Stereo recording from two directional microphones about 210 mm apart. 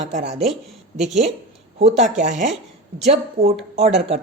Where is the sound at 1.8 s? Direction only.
35° right (ahead or behind).